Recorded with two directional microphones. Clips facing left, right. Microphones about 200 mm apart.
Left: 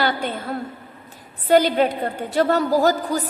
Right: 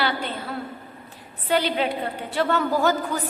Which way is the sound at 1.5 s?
45° left (ahead or behind).